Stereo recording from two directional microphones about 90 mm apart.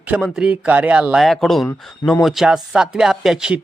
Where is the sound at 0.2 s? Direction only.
10° right (ahead or behind).